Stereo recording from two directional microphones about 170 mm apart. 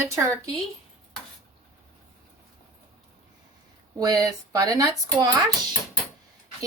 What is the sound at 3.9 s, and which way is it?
Speech, 25° right (ahead or behind).